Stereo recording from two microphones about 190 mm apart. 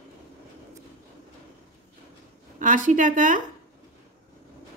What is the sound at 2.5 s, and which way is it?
Speech, 45° right (ahead or behind).